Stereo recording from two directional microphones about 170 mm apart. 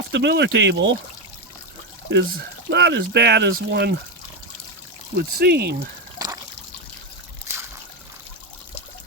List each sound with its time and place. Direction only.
0.1 s speech: 90° right
2.0 s speech: 90° right
5.1 s speech: 70° right (ahead or behind)
6.1 s trickle: 20° right (ahead or behind)